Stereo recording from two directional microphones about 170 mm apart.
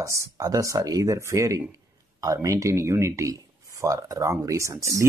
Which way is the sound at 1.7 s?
20° right (ahead or behind).